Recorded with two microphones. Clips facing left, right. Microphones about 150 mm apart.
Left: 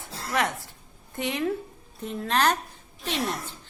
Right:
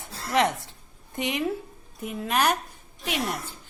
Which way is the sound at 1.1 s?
15° right (ahead or behind).